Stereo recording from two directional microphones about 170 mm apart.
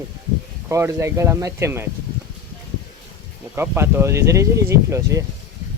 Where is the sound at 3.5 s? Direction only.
15° right (ahead or behind).